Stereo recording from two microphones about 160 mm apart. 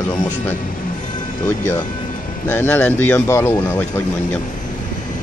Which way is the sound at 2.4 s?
10° left (ahead or behind).